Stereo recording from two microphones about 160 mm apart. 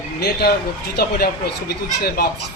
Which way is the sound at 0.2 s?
85° left.